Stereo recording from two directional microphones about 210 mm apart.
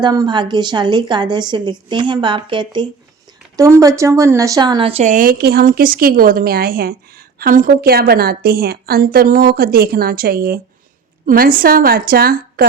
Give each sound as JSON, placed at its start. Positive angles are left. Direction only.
{"t": 0.0, "sound": "a woman's voice", "side_deg": -20}